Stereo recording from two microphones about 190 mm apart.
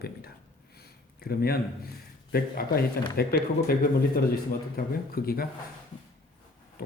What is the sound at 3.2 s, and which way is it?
Speech, 55° left (ahead or behind).